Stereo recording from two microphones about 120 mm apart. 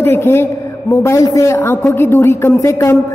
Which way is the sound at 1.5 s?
15° left (ahead or behind).